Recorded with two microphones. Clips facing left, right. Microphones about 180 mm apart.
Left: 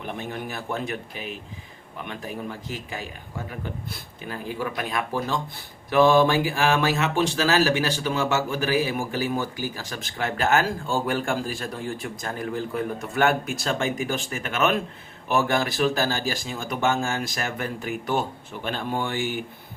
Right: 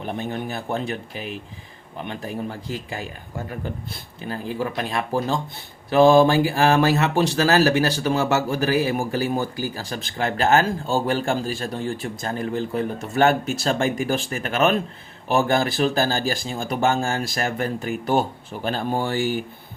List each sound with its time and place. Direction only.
0.0 s speech: 35° right (ahead or behind)
3.8 s speech: 30° right (ahead or behind)